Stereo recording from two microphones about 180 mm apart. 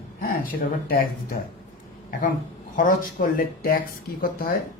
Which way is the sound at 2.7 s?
50° left (ahead or behind).